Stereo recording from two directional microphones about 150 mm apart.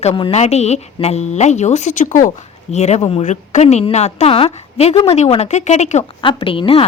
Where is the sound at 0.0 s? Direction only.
45° left (ahead or behind).